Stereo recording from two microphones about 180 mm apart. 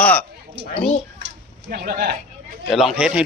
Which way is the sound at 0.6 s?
35° right (ahead or behind).